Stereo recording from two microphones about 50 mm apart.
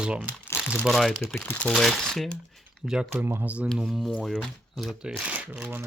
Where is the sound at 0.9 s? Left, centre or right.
Centre.